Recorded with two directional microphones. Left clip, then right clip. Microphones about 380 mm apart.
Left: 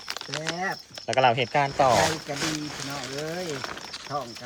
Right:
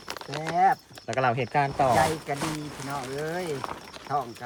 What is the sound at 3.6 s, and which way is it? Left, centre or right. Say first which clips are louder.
Speech: left 1 dB; centre.